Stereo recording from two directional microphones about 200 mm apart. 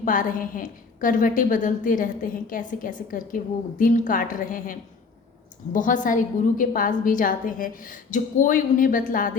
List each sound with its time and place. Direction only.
0.0 s a woman's voice: 40° left (ahead or behind)